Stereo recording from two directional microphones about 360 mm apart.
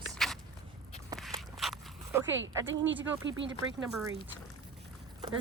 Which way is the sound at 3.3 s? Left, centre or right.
Right.